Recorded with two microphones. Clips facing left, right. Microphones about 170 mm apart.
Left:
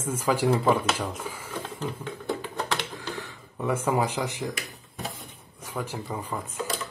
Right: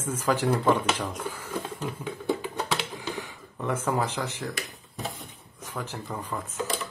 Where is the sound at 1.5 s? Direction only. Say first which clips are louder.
Left 1 dB; 10° right (ahead or behind).